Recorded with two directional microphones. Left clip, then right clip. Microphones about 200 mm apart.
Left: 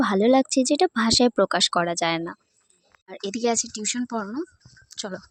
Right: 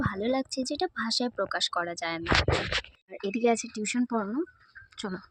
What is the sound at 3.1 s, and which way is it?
Speech, 5° left (ahead or behind).